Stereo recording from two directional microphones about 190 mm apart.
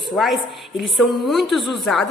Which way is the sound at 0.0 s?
Centre (ahead or behind).